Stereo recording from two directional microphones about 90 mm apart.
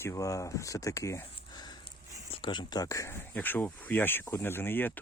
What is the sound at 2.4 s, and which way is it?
Speech, 60° left (ahead or behind).